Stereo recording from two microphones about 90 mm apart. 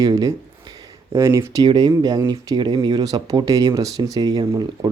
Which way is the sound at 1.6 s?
60° right (ahead or behind).